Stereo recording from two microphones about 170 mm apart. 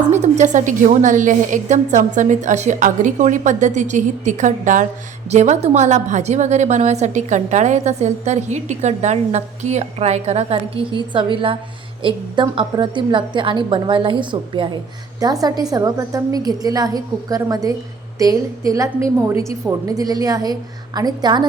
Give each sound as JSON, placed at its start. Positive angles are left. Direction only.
{"t": 0.1, "sound": "a woman's voice", "side_deg": -45}